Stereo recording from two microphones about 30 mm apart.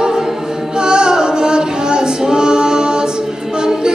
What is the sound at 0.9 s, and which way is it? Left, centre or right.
Singing, right.